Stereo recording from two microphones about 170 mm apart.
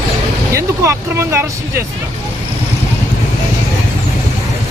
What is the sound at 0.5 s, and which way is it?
Speech, 15° right (ahead or behind).